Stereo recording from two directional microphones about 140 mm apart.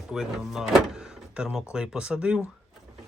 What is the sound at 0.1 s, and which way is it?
Speech, 5° right (ahead or behind).